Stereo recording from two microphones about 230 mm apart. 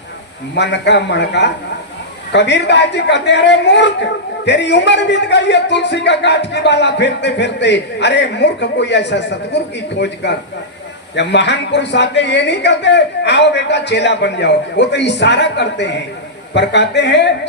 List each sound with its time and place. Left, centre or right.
0.5 s a man's voice: left